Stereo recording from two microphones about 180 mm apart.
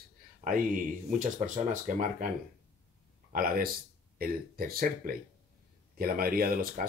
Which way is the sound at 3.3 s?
55° right (ahead or behind).